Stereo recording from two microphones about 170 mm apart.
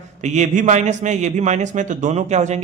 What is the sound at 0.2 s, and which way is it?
A man's voice, 45° right (ahead or behind).